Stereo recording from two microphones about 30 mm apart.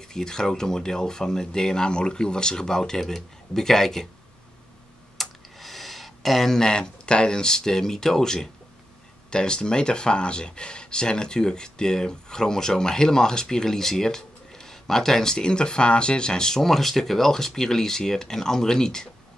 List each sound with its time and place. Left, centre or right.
0.0 s speech: left
5.1 s a sound: centre
6.6 s speech: left
9.3 s speech: left
15.3 s speech: left